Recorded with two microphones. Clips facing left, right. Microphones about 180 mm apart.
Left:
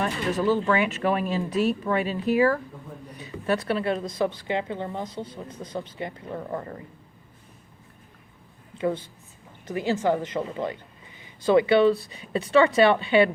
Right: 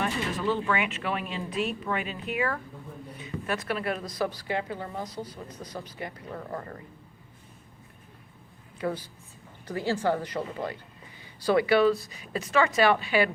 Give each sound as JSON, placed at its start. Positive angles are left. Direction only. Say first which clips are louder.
{"t": 0.0, "sound": "a woman's voice", "louder": "left 4 dB", "side_deg": 40}
{"t": 8.8, "sound": "a woman's voice", "louder": "left 5 dB", "side_deg": 25}